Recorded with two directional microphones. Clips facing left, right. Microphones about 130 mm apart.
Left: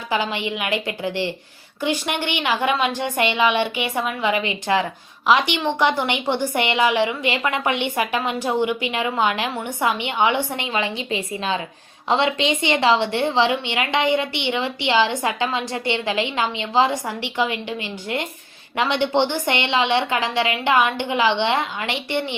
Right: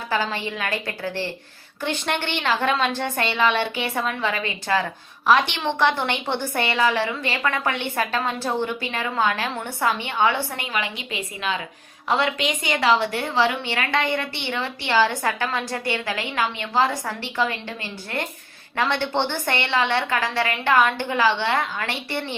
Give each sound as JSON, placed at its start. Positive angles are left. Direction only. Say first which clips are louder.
{"t": 0.1, "sound": "a woman's voice", "louder": "left 2 dB", "side_deg": 15}